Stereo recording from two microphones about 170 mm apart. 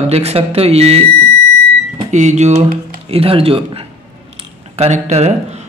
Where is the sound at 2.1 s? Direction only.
45° right (ahead or behind).